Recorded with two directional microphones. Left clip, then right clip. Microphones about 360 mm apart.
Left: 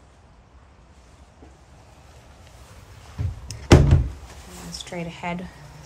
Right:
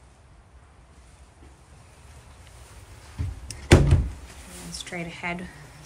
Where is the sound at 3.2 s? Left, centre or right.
Left.